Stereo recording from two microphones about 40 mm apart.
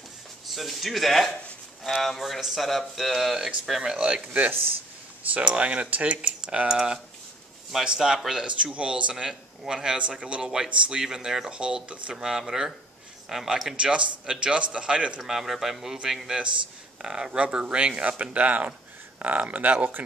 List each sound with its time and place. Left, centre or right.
0.5 s speech: centre
4.0 s speech: right
6.7 s a man's voice: centre
8.7 s a man's voice: right
10.5 s speech: centre
12.2 s speech: centre
13.7 s a man's voice: right
15.2 s speech: centre
17.0 s speech: centre; by 20.0 s right